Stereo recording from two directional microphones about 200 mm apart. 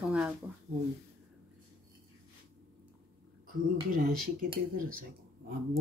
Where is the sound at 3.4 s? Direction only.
45° right (ahead or behind).